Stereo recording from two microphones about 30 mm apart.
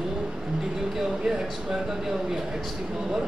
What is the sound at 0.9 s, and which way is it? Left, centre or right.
Speech, centre.